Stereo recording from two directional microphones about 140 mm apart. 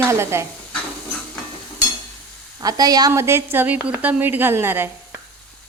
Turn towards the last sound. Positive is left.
turn(degrees=-15)  # may be behind; listen again after turning